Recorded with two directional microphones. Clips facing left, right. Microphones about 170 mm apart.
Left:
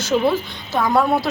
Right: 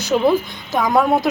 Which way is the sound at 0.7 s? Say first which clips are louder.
Right 1 dB; 15° right (ahead or behind).